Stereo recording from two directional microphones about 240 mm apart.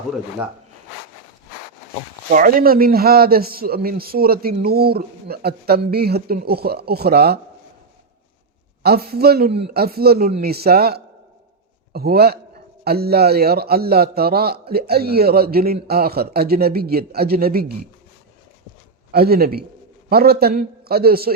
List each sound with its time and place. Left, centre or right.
2.3 s a man's voice: right
8.8 s a man's voice: right
19.1 s a man's voice: right